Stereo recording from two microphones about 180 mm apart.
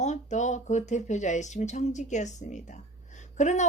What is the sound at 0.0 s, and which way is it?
Speech, 40° left (ahead or behind).